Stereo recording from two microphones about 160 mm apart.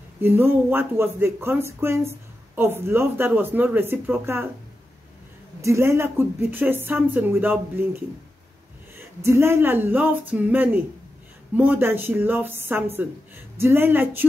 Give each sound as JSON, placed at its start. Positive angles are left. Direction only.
{"t": 0.2, "sound": "speech", "side_deg": -15}
{"t": 5.6, "sound": "speech", "side_deg": -15}